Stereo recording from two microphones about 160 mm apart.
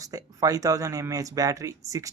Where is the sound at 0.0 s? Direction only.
20° right (ahead or behind).